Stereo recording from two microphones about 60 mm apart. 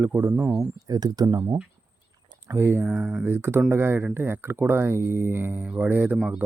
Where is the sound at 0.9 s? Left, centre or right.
Right.